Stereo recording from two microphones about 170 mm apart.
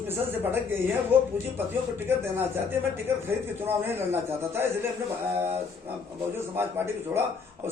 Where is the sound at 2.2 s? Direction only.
15° right (ahead or behind).